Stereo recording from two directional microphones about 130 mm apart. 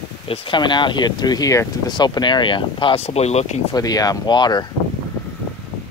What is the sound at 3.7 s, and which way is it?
Speech, 30° left (ahead or behind).